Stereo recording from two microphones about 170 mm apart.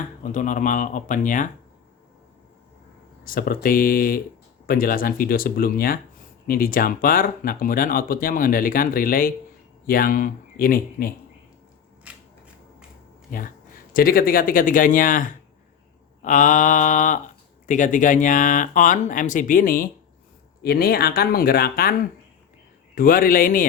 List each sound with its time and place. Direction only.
0.3 s speech: 50° left (ahead or behind)
3.2 s speech: 60° left (ahead or behind)
12.1 s scissors: 10° right (ahead or behind)
13.3 s speech: 55° left (ahead or behind)